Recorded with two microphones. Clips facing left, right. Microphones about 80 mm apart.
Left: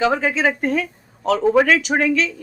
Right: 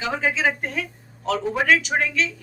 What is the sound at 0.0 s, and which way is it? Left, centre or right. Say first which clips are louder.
Speech: left 5 dB; left.